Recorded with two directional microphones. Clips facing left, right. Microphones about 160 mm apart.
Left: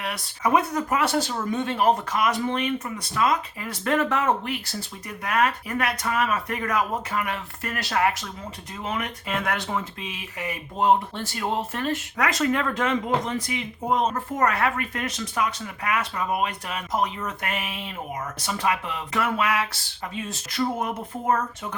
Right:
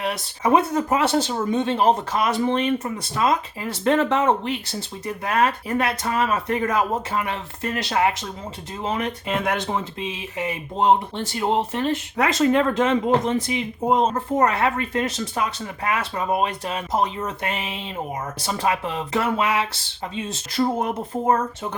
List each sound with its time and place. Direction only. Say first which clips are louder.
0.0 s speech: right 3 dB; 25° right (ahead or behind)